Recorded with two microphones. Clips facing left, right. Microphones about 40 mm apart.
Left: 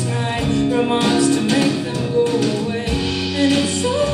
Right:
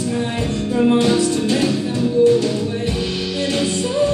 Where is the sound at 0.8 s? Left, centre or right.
Left.